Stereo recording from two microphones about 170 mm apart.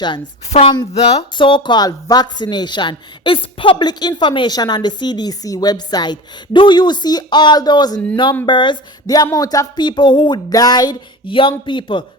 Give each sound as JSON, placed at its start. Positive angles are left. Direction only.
{"t": 0.5, "sound": "speech", "side_deg": 30}